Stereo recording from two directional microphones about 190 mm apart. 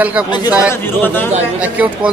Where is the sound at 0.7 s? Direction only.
10° left (ahead or behind).